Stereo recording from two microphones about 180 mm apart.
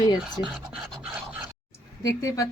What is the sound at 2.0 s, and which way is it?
Speech, 20° left (ahead or behind).